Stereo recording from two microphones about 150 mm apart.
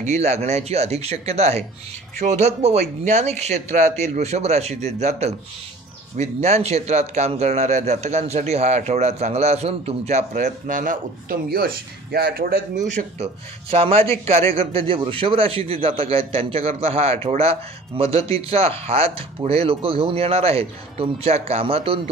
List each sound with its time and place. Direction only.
0.0 s a man's voice: 45° right (ahead or behind); by 12.6 s 90° right
12.7 s a man's voice: 50° right (ahead or behind)